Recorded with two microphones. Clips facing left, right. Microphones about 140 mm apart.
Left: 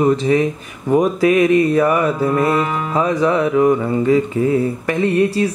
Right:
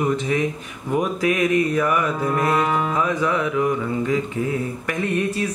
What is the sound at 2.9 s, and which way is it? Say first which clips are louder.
Speech: left 5 dB; 30° left (ahead or behind).